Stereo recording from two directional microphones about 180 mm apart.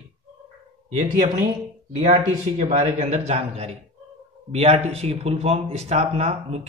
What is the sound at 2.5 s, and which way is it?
Speech, 40° right (ahead or behind).